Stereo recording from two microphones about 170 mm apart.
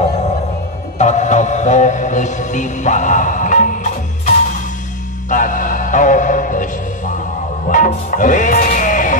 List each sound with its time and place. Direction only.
0.9 s music: 45° left (ahead or behind)
5.3 s music: 50° left (ahead or behind)
7.7 s music: 50° left (ahead or behind)